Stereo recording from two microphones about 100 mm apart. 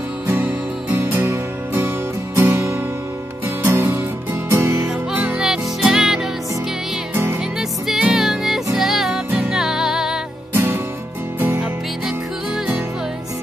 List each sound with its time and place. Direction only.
0.3 s music: 25° right (ahead or behind)
5.1 s music: 5° right (ahead or behind)
7.5 s music: 5° right (ahead or behind)
10.5 s music: 25° right (ahead or behind)